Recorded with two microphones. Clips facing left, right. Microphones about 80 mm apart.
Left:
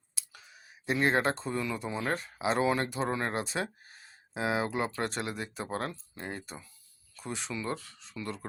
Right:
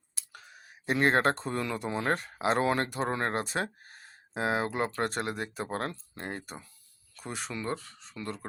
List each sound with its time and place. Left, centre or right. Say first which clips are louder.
0.1 s speech: right 3 dB; right